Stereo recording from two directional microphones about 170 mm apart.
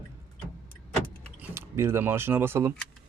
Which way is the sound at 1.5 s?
15° right (ahead or behind).